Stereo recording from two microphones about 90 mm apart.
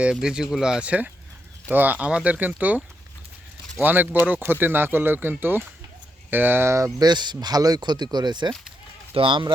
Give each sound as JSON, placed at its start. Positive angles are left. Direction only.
{"t": 0.0, "sound": "speech", "side_deg": -10}
{"t": 7.0, "sound": "speech", "side_deg": -55}
{"t": 9.1, "sound": "speech", "side_deg": -65}